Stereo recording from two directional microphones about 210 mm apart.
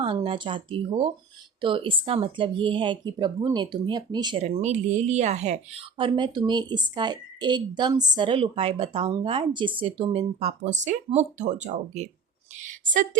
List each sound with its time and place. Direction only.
0.0 s a woman's voice: 25° right (ahead or behind)
4.4 s a woman's voice: 30° right (ahead or behind)